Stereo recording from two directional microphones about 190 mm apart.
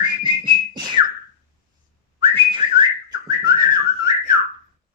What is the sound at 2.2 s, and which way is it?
Whistling, 25° right (ahead or behind).